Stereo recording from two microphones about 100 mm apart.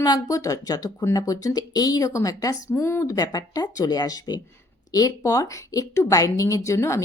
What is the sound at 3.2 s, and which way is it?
A woman's voice, 40° left (ahead or behind).